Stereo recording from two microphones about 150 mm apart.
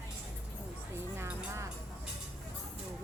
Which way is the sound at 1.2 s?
15° right (ahead or behind).